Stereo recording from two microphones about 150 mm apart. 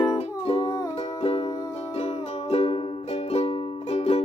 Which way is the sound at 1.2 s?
40° left (ahead or behind).